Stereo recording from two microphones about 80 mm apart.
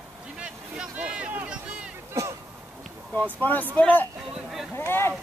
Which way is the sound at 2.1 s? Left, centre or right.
Right.